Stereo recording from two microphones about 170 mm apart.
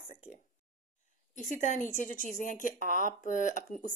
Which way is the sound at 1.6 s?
50° left (ahead or behind).